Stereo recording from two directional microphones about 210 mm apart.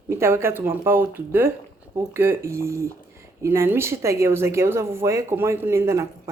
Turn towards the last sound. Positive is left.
turn(degrees=-15)  # may be behind; listen again after turning